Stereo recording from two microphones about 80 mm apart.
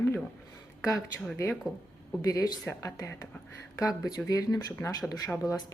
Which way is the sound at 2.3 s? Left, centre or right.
Left.